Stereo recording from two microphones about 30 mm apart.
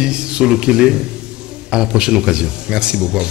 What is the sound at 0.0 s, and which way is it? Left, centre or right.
A man's voice, right.